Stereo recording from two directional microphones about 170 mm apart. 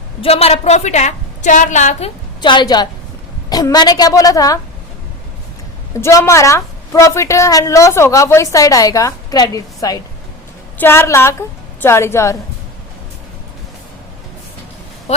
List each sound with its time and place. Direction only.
0.2 s a woman's voice: 35° left (ahead or behind)
2.4 s a woman's voice: 25° left (ahead or behind)
5.9 s a woman's voice: 20° left (ahead or behind)